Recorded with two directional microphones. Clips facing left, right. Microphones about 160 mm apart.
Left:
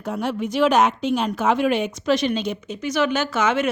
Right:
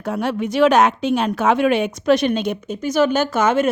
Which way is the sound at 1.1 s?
60° right (ahead or behind).